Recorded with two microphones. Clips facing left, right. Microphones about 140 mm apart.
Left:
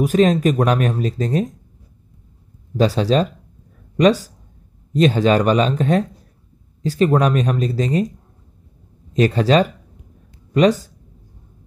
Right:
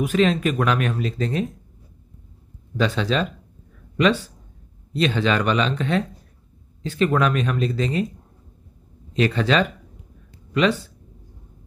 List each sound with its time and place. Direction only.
0.0 s speech: 40° left (ahead or behind)
2.8 s speech: 40° left (ahead or behind)
9.1 s speech: 40° left (ahead or behind)